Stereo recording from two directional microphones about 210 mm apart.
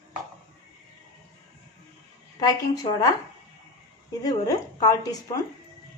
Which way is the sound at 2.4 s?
15° left (ahead or behind).